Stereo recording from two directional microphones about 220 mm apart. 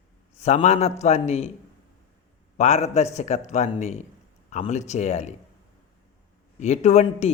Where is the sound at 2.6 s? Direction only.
30° left (ahead or behind).